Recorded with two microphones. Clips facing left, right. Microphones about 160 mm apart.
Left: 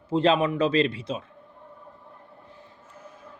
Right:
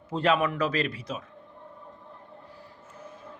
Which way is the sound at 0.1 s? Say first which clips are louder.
Left 3 dB; 25° left (ahead or behind).